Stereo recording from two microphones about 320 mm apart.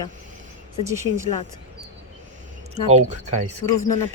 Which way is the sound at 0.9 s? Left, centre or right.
Centre.